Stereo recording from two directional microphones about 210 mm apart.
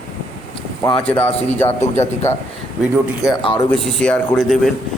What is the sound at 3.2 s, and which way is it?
Speech, 20° left (ahead or behind).